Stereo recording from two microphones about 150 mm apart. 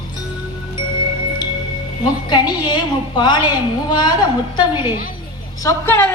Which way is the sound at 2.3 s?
30° left (ahead or behind).